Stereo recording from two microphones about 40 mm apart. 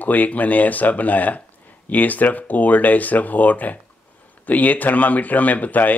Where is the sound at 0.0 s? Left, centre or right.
Left.